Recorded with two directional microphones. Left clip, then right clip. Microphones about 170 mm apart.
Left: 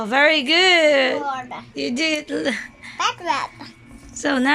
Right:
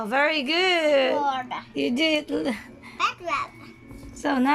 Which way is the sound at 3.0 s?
50° left (ahead or behind).